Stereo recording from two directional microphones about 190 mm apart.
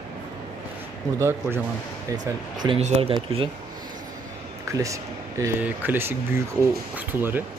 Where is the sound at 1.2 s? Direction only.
10° right (ahead or behind).